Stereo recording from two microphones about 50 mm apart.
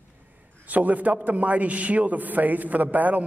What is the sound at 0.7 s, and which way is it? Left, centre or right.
A man's voice, right.